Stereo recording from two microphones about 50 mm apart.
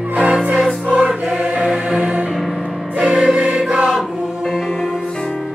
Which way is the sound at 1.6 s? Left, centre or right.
Centre.